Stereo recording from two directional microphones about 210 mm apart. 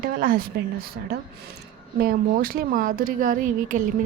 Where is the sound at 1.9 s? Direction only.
45° right (ahead or behind).